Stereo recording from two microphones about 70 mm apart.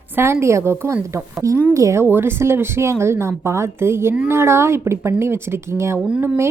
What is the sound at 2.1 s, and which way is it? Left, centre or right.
Speech, right.